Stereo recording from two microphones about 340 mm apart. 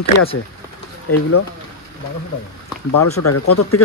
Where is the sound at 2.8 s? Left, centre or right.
Left.